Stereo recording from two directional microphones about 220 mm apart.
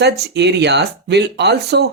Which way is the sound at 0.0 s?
50° right (ahead or behind).